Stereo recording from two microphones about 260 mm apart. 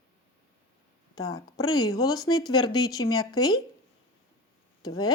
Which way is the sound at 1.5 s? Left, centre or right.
Centre.